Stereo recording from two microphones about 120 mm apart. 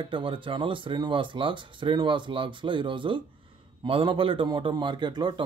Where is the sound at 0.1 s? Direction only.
45° right (ahead or behind).